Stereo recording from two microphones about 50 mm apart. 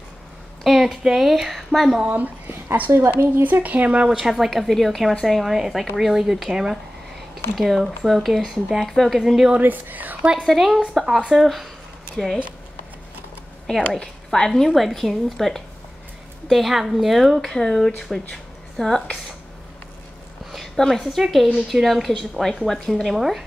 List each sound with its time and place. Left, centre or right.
0.8 s speech: centre
2.0 s speech: right
2.9 s a woman's voice: right
3.4 s speech: right
4.2 s speech: centre
9.2 s a woman's voice: centre
9.6 s speech: right
10.4 s speech: centre
13.9 s a woman's voice: centre
20.5 s a woman's voice: centre
22.3 s speech: centre